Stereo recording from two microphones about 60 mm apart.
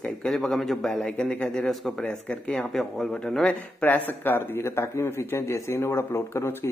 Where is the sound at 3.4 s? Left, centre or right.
Left.